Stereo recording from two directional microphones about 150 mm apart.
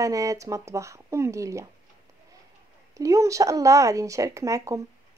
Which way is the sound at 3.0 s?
20° right (ahead or behind).